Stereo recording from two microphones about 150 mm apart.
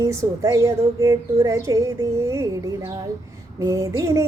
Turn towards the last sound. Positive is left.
turn(degrees=-20)  # may be behind; listen again after turning